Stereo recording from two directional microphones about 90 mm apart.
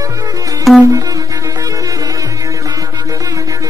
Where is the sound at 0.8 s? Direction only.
40° right (ahead or behind).